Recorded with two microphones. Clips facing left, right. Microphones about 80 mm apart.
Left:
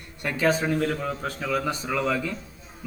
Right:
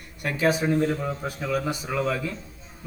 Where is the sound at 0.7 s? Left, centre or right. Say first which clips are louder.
Right 2 dB; right.